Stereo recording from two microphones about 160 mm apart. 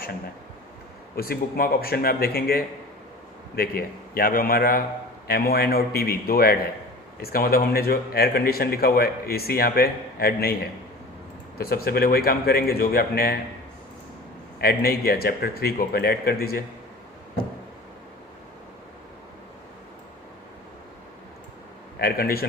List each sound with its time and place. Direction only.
1.1 s speech: 70° left (ahead or behind)
11.5 s speech: 75° left (ahead or behind)
14.6 s speech: 70° left (ahead or behind)
21.9 s speech: 70° left (ahead or behind)